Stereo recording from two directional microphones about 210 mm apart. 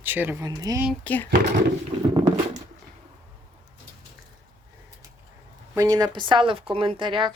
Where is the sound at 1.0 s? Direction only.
10° left (ahead or behind).